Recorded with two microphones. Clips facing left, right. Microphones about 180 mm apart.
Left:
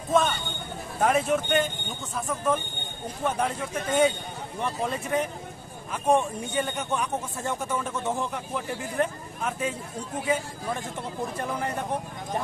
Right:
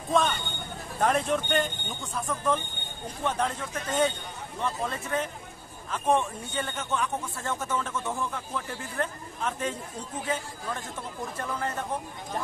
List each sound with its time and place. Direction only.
0.1 s speech: 5° left (ahead or behind)